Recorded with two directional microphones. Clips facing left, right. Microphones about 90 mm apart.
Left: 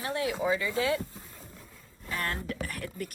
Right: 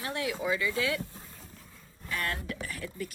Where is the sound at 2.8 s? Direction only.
55° left (ahead or behind).